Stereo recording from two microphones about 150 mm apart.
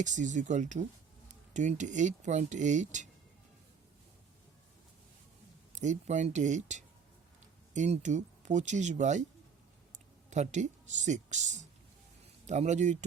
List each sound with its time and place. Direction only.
0.0 s speech: 55° right (ahead or behind)
5.7 s speech: 50° right (ahead or behind)
10.2 s speech: 50° right (ahead or behind)